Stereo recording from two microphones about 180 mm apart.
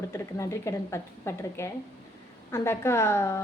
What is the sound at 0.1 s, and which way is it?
A woman's voice, 15° left (ahead or behind).